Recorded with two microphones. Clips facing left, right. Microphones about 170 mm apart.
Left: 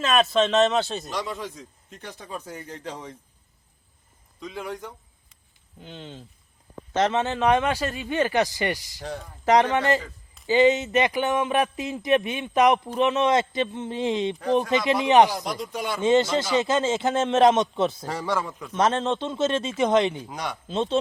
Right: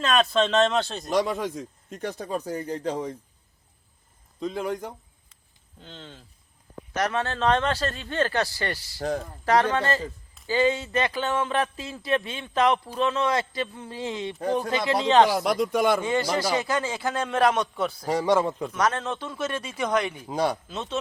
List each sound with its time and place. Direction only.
0.0 s speech: 5° left (ahead or behind)
1.1 s speech: 50° right (ahead or behind); by 3.2 s 35° right (ahead or behind)
4.4 s a man's voice: 35° right (ahead or behind)
5.8 s speech: 15° left (ahead or behind)
9.0 s speech: 45° right (ahead or behind)
9.4 s speech: 20° left (ahead or behind)
15.4 s speech: 60° right (ahead or behind)
16.0 s speech: 20° left (ahead or behind)
18.0 s a man's voice: 15° right (ahead or behind)
18.3 s a man's voice: 30° right (ahead or behind)
18.7 s speech: 25° left (ahead or behind)
20.2 s speech: 30° right (ahead or behind)
20.7 s speech: 30° left (ahead or behind)